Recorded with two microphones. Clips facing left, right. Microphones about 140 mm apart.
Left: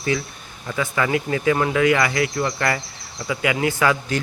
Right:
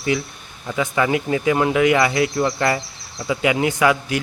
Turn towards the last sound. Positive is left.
turn(degrees=-15)  # may be behind; listen again after turning